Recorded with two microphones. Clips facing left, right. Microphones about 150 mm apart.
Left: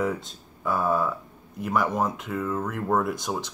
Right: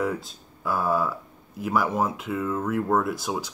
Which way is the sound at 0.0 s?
Centre (ahead or behind).